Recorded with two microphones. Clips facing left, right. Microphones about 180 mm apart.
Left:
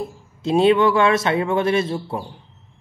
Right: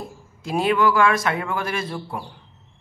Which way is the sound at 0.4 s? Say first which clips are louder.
Left 5 dB; 25° left (ahead or behind).